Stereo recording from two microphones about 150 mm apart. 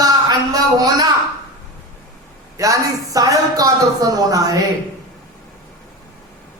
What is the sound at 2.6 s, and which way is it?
Speech, 20° right (ahead or behind).